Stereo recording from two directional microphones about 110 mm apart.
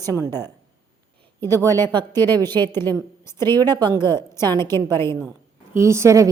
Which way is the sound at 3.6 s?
40° right (ahead or behind).